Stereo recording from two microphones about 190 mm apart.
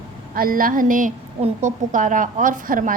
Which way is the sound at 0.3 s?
50° right (ahead or behind).